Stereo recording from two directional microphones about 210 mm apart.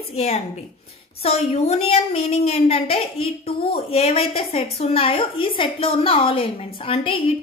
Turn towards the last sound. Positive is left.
turn(degrees=25)  # may be behind; listen again after turning